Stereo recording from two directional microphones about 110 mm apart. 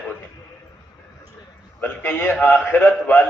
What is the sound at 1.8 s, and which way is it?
A man's voice, 20° left (ahead or behind).